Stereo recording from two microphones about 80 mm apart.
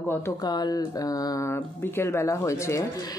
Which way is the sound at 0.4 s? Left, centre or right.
Left.